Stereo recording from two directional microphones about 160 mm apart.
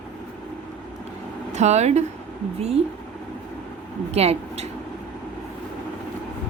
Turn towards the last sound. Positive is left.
turn(degrees=-40)  # may be behind; listen again after turning